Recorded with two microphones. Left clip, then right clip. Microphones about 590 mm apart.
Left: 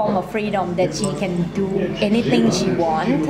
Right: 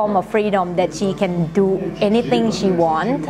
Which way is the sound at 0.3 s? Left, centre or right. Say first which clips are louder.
Right 4 dB; right.